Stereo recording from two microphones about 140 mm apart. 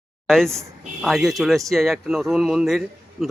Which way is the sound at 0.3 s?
5° left (ahead or behind).